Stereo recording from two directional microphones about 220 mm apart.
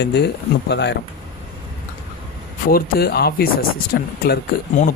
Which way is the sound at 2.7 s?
45° left (ahead or behind).